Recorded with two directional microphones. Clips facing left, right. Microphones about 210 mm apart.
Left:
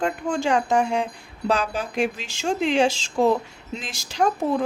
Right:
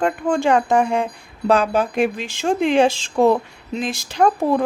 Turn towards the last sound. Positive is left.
turn(degrees=-55)  # may be behind; listen again after turning